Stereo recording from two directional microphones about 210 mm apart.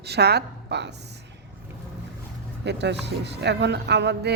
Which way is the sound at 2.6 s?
55° right (ahead or behind).